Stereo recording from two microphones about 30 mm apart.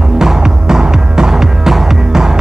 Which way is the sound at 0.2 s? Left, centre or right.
Centre.